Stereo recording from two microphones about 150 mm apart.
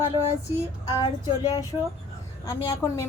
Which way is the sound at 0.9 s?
25° left (ahead or behind).